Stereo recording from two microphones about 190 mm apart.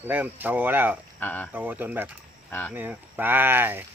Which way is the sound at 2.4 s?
10° left (ahead or behind).